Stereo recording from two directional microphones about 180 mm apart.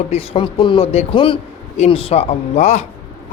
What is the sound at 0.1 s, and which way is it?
A man's voice, 30° left (ahead or behind).